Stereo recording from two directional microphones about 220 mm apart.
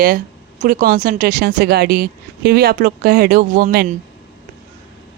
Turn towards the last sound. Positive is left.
turn(degrees=-45)  # may be behind; listen again after turning